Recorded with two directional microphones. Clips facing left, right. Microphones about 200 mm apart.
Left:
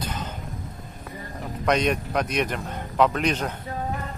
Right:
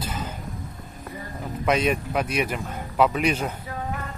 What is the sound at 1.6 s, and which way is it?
Speech, 5° right (ahead or behind).